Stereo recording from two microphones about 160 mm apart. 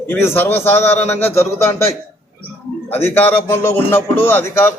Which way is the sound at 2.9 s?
15° left (ahead or behind).